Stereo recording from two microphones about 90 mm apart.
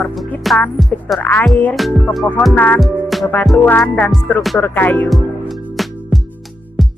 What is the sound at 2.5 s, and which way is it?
Speech, 20° left (ahead or behind).